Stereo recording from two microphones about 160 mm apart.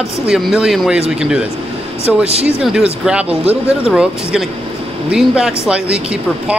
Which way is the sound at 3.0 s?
5° right (ahead or behind).